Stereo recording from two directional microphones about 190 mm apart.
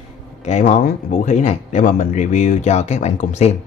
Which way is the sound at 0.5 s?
40° left (ahead or behind).